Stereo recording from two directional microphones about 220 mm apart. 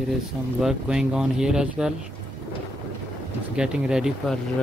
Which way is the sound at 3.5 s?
5° right (ahead or behind).